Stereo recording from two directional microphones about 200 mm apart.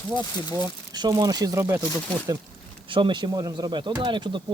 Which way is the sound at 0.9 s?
20° right (ahead or behind).